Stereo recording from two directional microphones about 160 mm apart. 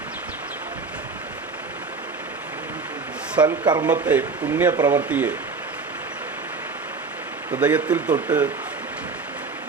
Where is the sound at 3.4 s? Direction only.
30° right (ahead or behind).